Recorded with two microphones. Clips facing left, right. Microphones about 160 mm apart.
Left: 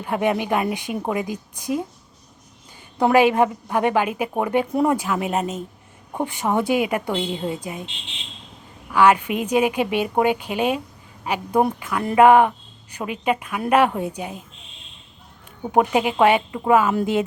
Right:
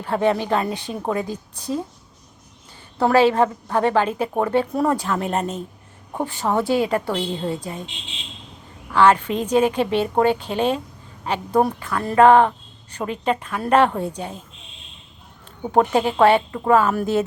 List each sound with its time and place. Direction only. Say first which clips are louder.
0.0 s a woman's voice: right 2 dB; 15° left (ahead or behind)
3.0 s a woman's voice: even; 15° left (ahead or behind)
6.1 s a woman's voice: even; 15° left (ahead or behind)
8.9 s a woman's voice: even; 10° left (ahead or behind)
15.6 s a woman's voice: right 1 dB; 10° left (ahead or behind)